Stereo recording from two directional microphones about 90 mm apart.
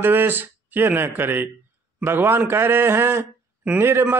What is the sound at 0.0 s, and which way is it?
Speech, 25° right (ahead or behind).